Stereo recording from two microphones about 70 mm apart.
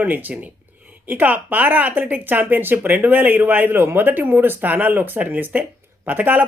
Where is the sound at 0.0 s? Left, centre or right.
Right.